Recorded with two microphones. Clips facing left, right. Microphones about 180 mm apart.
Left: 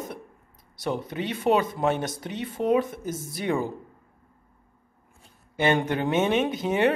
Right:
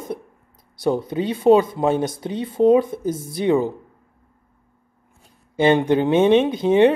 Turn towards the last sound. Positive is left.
turn(degrees=-25)  # may be behind; listen again after turning